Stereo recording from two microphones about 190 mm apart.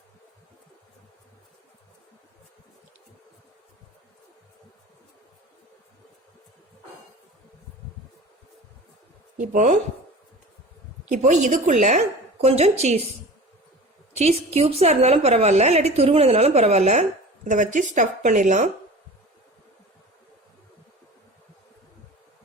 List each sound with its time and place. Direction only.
9.4 s speech: 45° right (ahead or behind)
11.1 s a woman's voice: 40° right (ahead or behind)
14.2 s a woman's voice: 35° right (ahead or behind)